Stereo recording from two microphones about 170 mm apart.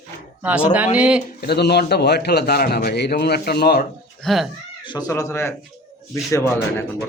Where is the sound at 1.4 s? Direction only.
75° left (ahead or behind).